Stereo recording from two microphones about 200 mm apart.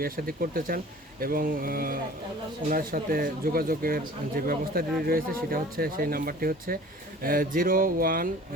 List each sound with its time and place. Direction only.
0.0 s speech: 45° right (ahead or behind)